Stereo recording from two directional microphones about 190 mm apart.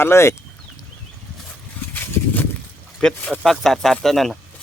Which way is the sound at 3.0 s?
5° left (ahead or behind).